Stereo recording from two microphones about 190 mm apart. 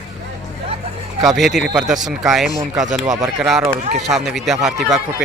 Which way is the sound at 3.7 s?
40° right (ahead or behind).